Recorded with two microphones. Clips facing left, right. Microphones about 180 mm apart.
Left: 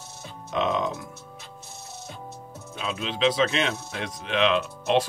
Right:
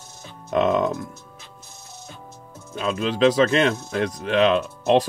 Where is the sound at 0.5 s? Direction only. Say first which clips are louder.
Right 6 dB; 50° right (ahead or behind).